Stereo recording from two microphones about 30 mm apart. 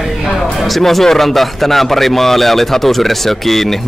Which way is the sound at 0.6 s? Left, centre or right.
Centre.